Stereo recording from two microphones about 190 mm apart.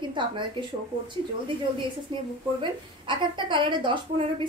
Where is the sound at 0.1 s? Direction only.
25° right (ahead or behind).